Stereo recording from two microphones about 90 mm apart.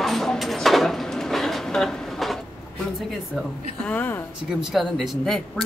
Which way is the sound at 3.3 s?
5° left (ahead or behind).